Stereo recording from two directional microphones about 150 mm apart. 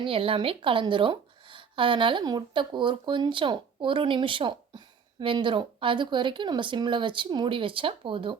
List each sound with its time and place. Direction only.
0.0 s a woman's voice: 35° right (ahead or behind)